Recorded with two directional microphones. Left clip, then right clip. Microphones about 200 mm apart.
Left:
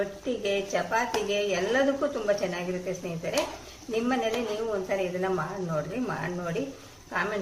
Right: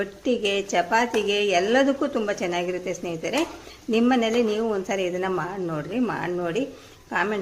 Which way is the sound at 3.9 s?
50° right (ahead or behind).